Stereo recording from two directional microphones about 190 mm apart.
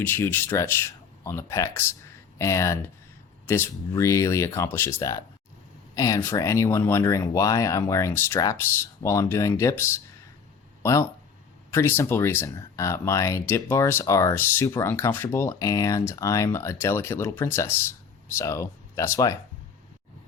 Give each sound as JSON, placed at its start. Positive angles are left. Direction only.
{"t": 0.0, "sound": "speech", "side_deg": 10}
{"t": 11.7, "sound": "speech", "side_deg": 10}